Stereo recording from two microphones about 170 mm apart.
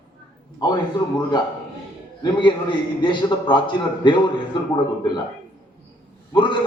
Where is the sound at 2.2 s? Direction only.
25° left (ahead or behind).